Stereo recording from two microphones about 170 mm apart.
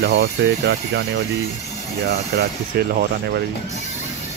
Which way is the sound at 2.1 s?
70° right (ahead or behind).